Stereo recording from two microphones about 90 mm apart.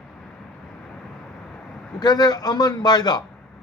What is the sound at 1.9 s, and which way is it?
Speech, 45° left (ahead or behind).